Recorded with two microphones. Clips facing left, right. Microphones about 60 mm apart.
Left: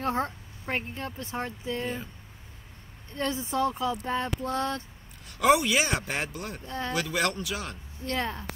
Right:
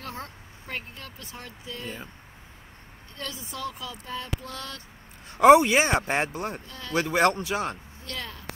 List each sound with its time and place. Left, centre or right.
0.0 s speech: left
3.2 s speech: left
5.3 s speech: right
6.6 s speech: left
7.0 s speech: right
8.0 s speech: left